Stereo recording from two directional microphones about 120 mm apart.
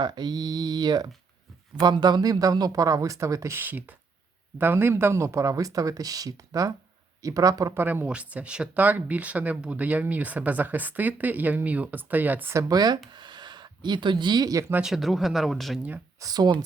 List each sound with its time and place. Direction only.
0.0 s speech: 35° right (ahead or behind)
8.0 s speech: 10° right (ahead or behind); by 13.0 s 35° right (ahead or behind)
13.1 s a sound: 40° right (ahead or behind)
14.7 s speech: 5° right (ahead or behind)
16.2 s speech: 35° right (ahead or behind)